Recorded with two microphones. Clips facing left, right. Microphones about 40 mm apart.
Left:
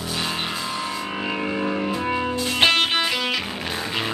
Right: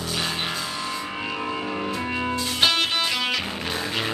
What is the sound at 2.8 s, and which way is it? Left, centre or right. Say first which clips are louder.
Music: left 3 dB; left.